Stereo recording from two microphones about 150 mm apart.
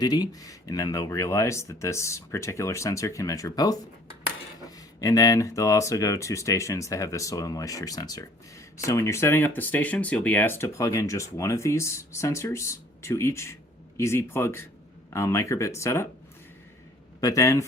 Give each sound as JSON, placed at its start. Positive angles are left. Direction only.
{"t": 0.0, "sound": "speech", "side_deg": 25}
{"t": 4.9, "sound": "speech", "side_deg": 25}
{"t": 17.2, "sound": "speech", "side_deg": 25}